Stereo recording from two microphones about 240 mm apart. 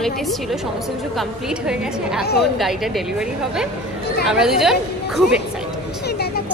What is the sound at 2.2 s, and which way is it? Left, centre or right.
Speech, left.